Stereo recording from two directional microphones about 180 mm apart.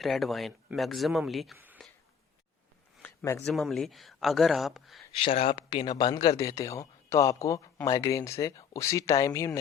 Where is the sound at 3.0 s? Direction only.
15° left (ahead or behind).